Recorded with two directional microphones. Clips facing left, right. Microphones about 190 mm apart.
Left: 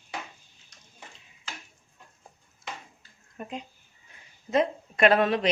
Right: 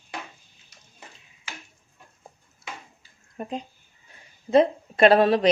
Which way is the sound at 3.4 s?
35° right (ahead or behind).